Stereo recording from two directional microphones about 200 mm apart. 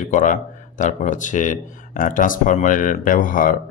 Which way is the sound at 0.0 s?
40° left (ahead or behind).